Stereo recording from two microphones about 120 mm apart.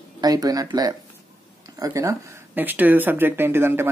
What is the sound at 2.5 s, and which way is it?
Speech, 15° right (ahead or behind).